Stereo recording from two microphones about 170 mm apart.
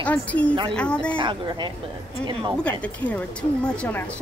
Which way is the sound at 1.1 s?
25° right (ahead or behind).